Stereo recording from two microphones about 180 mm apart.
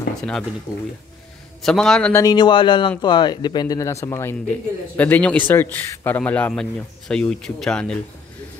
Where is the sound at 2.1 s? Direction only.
20° left (ahead or behind); by 8.0 s 5° left (ahead or behind).